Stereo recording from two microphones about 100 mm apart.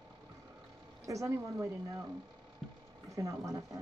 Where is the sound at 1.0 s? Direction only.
30° right (ahead or behind).